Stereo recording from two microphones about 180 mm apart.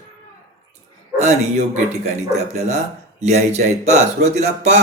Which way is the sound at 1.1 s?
40° right (ahead or behind).